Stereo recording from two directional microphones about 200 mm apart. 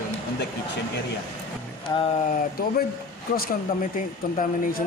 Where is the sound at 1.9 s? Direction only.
20° left (ahead or behind).